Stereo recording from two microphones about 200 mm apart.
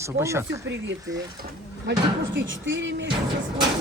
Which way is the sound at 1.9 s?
65° right (ahead or behind).